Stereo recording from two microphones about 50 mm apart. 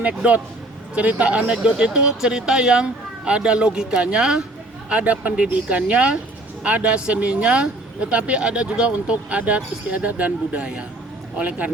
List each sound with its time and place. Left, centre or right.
0.2 s speech: right
4.9 s speech: right